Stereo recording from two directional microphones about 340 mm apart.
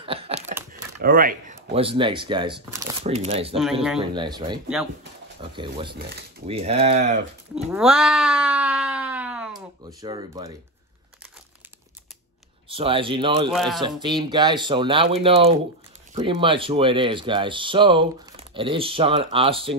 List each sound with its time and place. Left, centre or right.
0.0 s a sound: centre
1.0 s speech: right
5.9 s speech: right
6.5 s speech: centre
7.7 s a sound: centre
10.0 s speech: centre
12.6 s speech: centre
13.5 s speech: centre
14.0 s speech: centre